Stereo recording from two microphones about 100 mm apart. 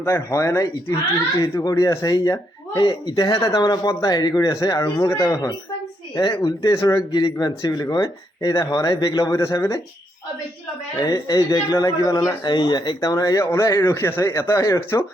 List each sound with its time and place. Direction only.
0.0 s speech: 30° left (ahead or behind)
7.1 s speech: 50° left (ahead or behind); by 9.8 s 30° left (ahead or behind)
11.0 s speech: 40° left (ahead or behind)